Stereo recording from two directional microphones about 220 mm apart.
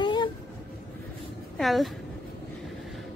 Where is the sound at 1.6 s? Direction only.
Centre (ahead or behind).